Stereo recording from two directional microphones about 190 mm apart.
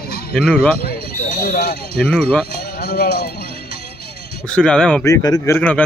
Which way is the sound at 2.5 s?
55° left (ahead or behind).